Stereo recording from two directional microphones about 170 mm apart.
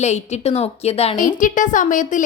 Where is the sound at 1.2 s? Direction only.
50° left (ahead or behind).